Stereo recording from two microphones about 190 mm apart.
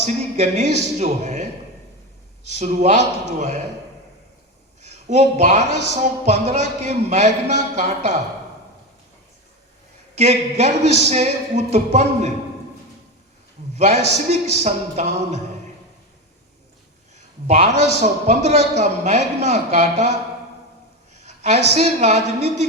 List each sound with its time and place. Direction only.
0.0 s speech: 35° right (ahead or behind)
2.5 s speech: 35° right (ahead or behind)
4.8 s speech: 35° right (ahead or behind)
10.2 s speech: 35° right (ahead or behind)
13.7 s speech: 35° right (ahead or behind)
17.4 s speech: 35° right (ahead or behind)
21.2 s a sound: 35° right (ahead or behind)
21.8 s speech: 35° right (ahead or behind)